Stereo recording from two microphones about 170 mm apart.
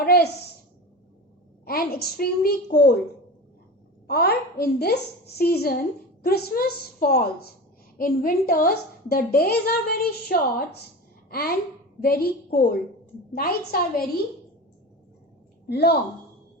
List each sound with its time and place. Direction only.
0.0 s a woman's voice: 65° left (ahead or behind)
1.6 s a woman's voice: 65° left (ahead or behind)
4.0 s a woman's voice: 70° left (ahead or behind)
15.6 s a woman's voice: 70° left (ahead or behind)